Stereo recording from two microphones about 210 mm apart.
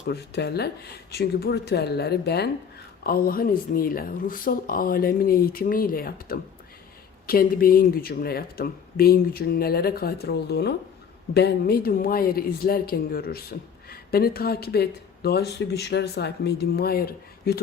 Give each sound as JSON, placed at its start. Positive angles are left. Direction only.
{"t": 0.1, "sound": "speech", "side_deg": 50}